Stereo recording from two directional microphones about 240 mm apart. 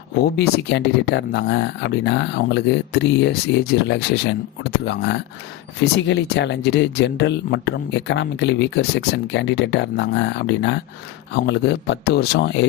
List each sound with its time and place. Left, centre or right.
0.3 s speech: left